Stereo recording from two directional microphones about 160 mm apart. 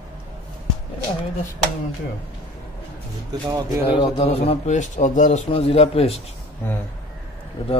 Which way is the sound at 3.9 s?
30° left (ahead or behind).